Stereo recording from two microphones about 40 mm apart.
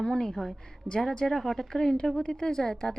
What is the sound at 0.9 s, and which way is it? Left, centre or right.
A woman's voice, centre.